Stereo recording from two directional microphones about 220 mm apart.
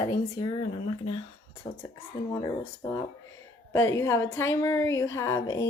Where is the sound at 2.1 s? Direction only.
15° left (ahead or behind).